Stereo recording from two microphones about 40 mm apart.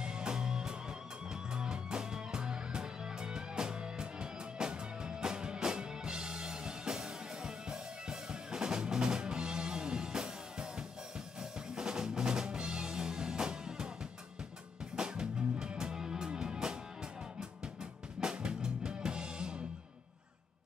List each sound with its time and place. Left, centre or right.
0.0 s music: right
11.7 s music: centre
15.0 s music: centre
18.2 s drum kit: right